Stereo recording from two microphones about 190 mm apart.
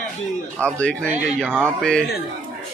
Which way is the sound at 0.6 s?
5° left (ahead or behind).